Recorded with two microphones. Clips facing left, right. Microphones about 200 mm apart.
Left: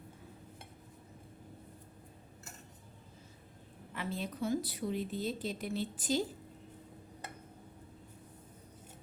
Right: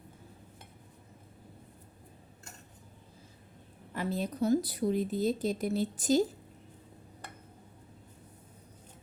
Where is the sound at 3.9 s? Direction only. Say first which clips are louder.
Right 6 dB; 40° right (ahead or behind).